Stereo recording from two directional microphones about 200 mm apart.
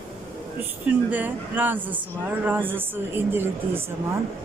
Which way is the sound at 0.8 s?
10° right (ahead or behind).